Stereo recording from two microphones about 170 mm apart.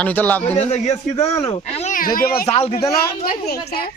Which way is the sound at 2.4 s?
35° left (ahead or behind).